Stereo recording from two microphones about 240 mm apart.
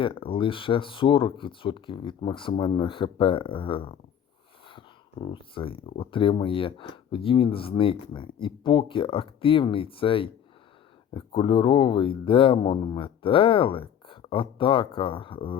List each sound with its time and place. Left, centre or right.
0.0 s speech: left